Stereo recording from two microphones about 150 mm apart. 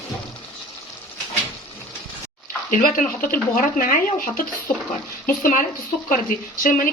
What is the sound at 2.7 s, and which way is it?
Speech, 65° left (ahead or behind).